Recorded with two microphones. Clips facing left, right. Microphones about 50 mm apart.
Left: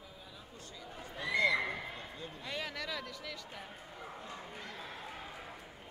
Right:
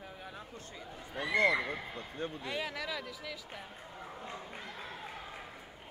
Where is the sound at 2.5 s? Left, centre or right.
Centre.